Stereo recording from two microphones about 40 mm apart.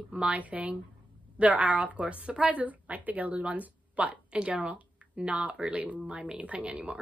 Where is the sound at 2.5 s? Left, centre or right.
Right.